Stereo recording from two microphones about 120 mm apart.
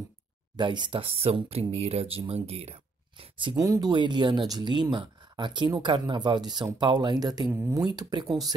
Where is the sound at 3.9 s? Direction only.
40° right (ahead or behind).